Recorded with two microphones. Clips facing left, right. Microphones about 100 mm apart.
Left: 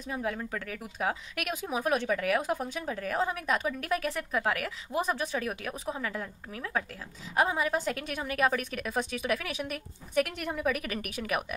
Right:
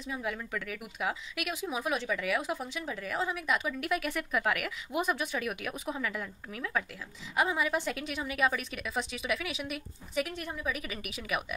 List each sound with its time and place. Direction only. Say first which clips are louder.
0.0 s speech: left 3 dB; 40° left (ahead or behind)
1.3 s a woman's voice: left 2 dB; 50° left (ahead or behind)
10.2 s a woman's voice: left 5 dB; 70° left (ahead or behind); by 11.4 s 50° left (ahead or behind)